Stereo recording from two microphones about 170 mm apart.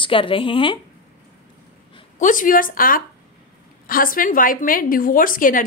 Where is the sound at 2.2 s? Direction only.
50° left (ahead or behind).